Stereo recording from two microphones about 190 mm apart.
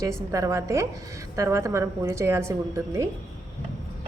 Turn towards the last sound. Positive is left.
turn(degrees=-15)  # may be behind; listen again after turning